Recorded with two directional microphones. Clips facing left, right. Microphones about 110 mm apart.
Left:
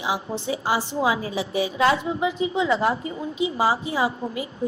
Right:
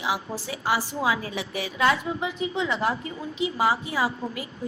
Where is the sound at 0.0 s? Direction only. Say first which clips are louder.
Left 2 dB; 25° left (ahead or behind).